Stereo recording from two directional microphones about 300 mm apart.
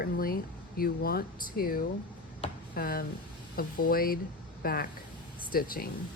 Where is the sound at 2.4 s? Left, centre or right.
Left.